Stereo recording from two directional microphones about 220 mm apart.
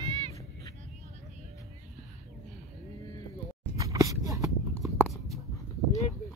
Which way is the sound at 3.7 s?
15° right (ahead or behind).